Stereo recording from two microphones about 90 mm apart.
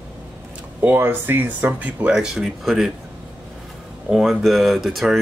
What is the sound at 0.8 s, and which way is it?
Speech, 20° right (ahead or behind).